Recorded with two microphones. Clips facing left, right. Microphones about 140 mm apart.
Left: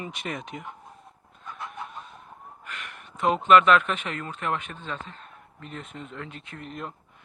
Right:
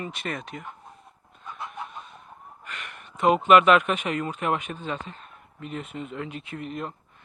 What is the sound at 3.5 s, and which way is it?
Speech, 10° right (ahead or behind).